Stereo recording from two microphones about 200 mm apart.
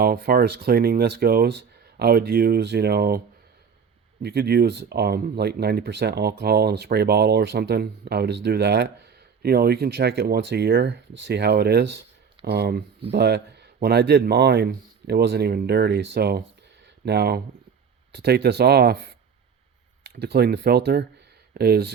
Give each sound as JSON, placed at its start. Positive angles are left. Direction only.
{"t": 0.0, "sound": "speech", "side_deg": -50}
{"t": 4.2, "sound": "speech", "side_deg": -55}
{"t": 16.8, "sound": "a sound", "side_deg": -55}
{"t": 18.1, "sound": "speech", "side_deg": -55}